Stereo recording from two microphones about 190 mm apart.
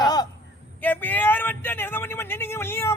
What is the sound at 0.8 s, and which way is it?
Speech, 10° left (ahead or behind).